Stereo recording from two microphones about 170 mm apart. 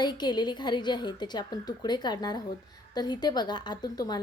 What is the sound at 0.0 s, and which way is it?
A woman's voice, 25° left (ahead or behind).